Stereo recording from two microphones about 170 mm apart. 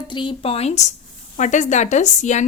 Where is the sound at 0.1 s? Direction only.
30° left (ahead or behind).